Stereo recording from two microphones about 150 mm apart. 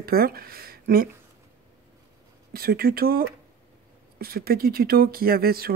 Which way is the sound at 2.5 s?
90° right.